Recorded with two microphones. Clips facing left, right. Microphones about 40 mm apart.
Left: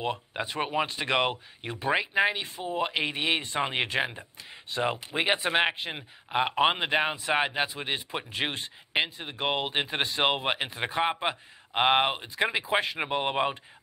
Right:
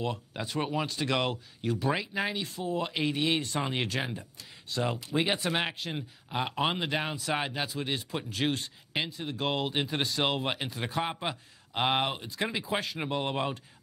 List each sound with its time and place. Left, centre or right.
0.0 s speech: left